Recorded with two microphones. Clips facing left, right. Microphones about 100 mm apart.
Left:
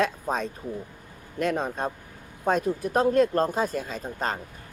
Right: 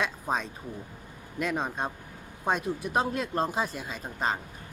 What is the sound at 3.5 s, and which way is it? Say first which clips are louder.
Speech: left 4 dB; 40° left (ahead or behind).